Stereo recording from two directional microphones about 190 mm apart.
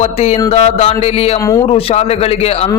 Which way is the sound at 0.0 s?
35° left (ahead or behind).